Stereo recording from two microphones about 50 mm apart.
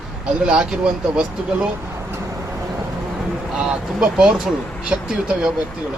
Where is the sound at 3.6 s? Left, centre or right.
Centre.